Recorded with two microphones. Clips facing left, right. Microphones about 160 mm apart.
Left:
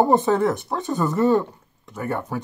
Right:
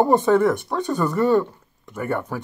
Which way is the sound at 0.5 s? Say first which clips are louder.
Right 1 dB; centre (ahead or behind).